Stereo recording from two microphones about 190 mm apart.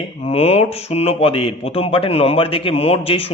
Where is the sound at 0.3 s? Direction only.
35° left (ahead or behind).